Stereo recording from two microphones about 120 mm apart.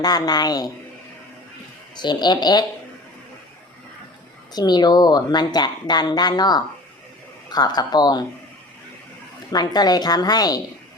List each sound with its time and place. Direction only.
0.0 s a woman's voice: 35° left (ahead or behind)
2.0 s a woman's voice: 35° left (ahead or behind)
4.5 s a woman's voice: 35° left (ahead or behind)
9.5 s a woman's voice: 35° left (ahead or behind)